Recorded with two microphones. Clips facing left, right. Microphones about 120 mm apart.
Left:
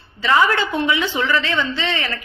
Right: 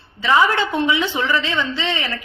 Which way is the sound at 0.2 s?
15° right (ahead or behind).